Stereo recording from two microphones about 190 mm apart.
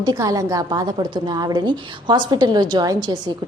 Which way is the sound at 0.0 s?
20° right (ahead or behind).